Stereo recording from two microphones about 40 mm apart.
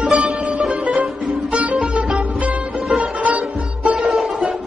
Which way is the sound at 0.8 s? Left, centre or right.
Centre.